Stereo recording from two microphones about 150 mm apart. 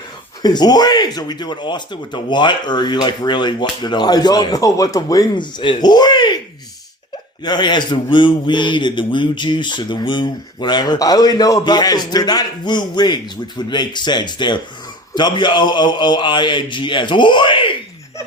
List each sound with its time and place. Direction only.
0.4 s speech: 30° left (ahead or behind)
7.4 s speech: 30° left (ahead or behind)